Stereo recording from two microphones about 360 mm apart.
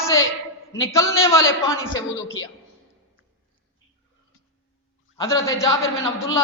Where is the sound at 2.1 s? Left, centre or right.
Left.